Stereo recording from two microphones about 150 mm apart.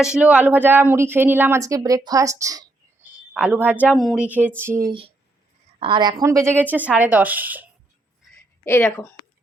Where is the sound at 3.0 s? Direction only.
10° right (ahead or behind).